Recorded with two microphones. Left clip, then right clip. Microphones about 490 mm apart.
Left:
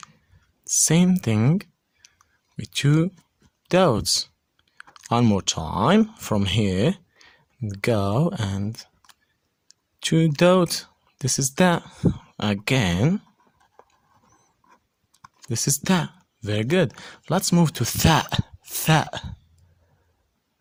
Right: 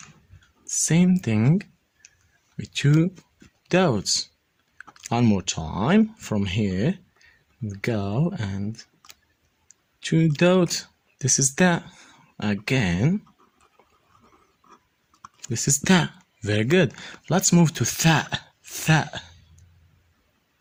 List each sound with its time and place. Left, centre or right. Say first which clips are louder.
0.6 s clicking: left 3 dB; left
2.6 s speech: even; left
15.2 s speech: left 1 dB; left